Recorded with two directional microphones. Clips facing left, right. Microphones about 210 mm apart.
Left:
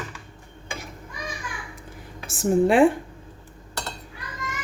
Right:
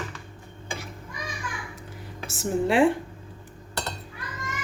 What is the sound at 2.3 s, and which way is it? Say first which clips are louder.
Speech: left 5 dB; 50° left (ahead or behind).